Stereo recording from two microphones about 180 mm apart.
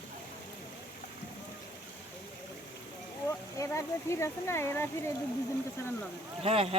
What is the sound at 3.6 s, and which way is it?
Speech, 15° left (ahead or behind).